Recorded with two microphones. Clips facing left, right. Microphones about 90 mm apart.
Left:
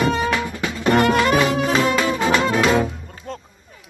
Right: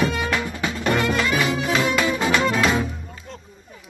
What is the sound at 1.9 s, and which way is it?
Music, 40° left (ahead or behind).